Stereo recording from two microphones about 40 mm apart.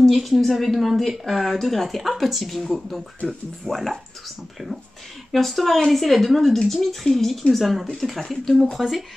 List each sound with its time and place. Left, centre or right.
0.0 s speech: centre
5.3 s speech: centre